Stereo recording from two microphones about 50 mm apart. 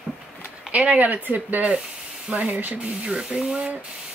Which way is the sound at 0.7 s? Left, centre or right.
Right.